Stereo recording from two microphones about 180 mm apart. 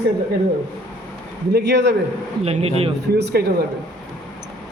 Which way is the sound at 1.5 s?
70° right (ahead or behind).